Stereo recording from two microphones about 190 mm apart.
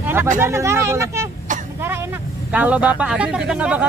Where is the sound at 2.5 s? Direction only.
10° right (ahead or behind).